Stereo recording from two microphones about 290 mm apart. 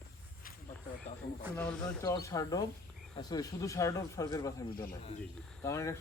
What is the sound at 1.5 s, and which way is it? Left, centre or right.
A man's voice, centre.